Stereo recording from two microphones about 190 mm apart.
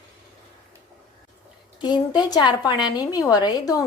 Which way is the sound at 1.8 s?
20° left (ahead or behind).